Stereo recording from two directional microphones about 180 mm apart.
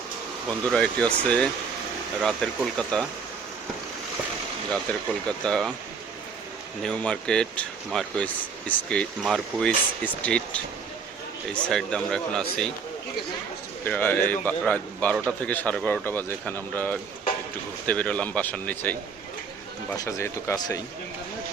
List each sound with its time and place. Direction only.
0.7 s speech: 5° left (ahead or behind)
5.4 s speech: 5° left (ahead or behind)
6.8 s a man's voice: 5° left (ahead or behind)
13.8 s a man's voice: 10° left (ahead or behind)